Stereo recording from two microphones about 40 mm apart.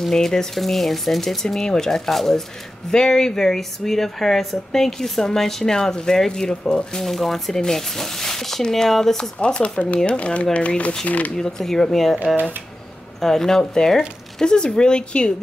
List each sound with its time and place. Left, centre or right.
0.0 s speech: centre
7.1 s speech: centre
9.4 s speech: left
11.3 s speech: centre
13.2 s speech: centre